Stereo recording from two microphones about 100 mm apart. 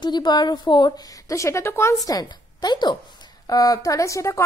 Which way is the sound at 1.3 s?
30° left (ahead or behind).